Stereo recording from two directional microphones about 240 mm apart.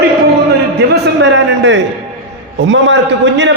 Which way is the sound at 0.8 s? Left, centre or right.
Right.